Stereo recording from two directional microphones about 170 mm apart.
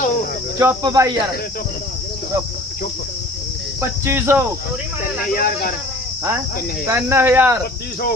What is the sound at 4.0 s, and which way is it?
Speech, 15° right (ahead or behind).